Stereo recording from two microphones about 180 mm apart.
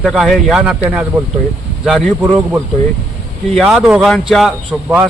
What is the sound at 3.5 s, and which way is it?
Speech, centre (ahead or behind).